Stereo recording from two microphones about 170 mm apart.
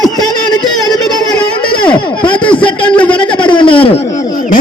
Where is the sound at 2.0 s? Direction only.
30° left (ahead or behind).